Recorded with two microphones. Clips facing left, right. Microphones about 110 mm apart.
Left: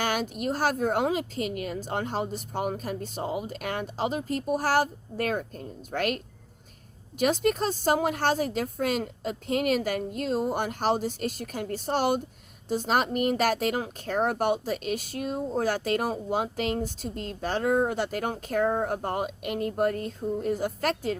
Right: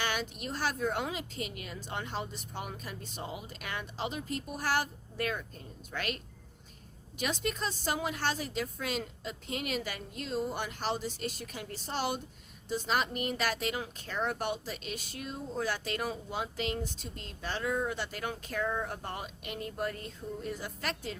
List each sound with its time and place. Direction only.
0.0 s speech: 45° left (ahead or behind)
7.2 s speech: 45° left (ahead or behind)